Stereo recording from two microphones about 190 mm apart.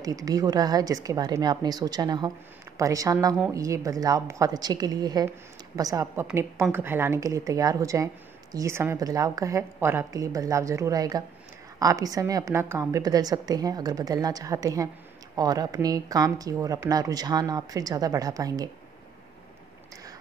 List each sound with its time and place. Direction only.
0.0 s a woman's voice: 20° right (ahead or behind)